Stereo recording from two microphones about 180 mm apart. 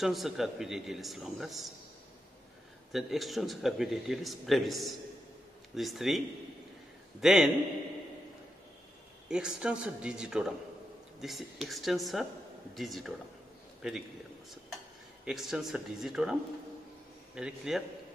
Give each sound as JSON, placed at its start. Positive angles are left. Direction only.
{"t": 0.0, "sound": "speech", "side_deg": 0}
{"t": 2.9, "sound": "speech", "side_deg": 0}
{"t": 9.3, "sound": "speech", "side_deg": -5}
{"t": 15.2, "sound": "speech", "side_deg": -5}
{"t": 17.4, "sound": "speech", "side_deg": -5}